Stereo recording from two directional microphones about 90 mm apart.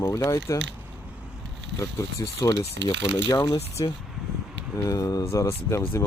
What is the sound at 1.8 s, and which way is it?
Speech, 35° left (ahead or behind).